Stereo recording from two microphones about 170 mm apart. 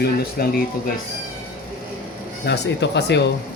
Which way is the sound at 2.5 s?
90° left.